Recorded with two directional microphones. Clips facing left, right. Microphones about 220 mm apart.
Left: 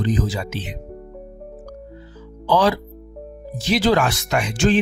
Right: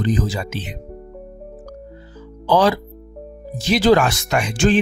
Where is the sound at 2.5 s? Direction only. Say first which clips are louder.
Right 2 dB; 45° right (ahead or behind).